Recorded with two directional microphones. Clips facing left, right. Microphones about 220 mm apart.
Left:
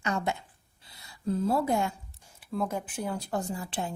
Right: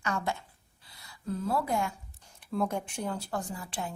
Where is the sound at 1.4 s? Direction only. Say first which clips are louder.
Left 3 dB; 25° left (ahead or behind).